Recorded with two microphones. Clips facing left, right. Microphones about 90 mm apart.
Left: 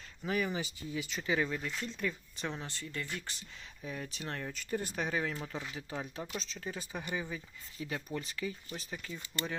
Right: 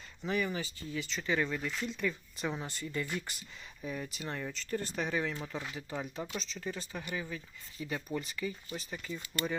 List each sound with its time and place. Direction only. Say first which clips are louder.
0.2 s speech: even; 5° left (ahead or behind)
0.5 s speech: even; 15° left (ahead or behind); by 2.6 s 5° right (ahead or behind)
2.6 s speech: right 4 dB; 15° right (ahead or behind)
3.8 s speech: right 2 dB; centre (ahead or behind)
6.9 s speech: left 1 dB; 25° left (ahead or behind)
7.3 s speech: even; 5° left (ahead or behind)